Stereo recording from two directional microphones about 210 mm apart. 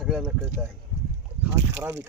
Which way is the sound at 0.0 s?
Centre (ahead or behind).